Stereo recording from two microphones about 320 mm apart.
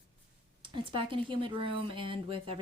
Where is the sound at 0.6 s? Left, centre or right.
Centre.